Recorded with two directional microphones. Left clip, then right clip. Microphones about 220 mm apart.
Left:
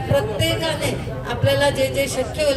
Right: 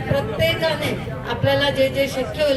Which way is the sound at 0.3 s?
55° left (ahead or behind).